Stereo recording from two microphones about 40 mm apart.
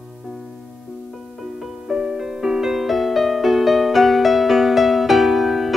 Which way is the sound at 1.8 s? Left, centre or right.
Centre.